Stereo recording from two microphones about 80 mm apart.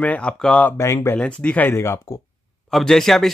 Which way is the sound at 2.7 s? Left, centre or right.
Centre.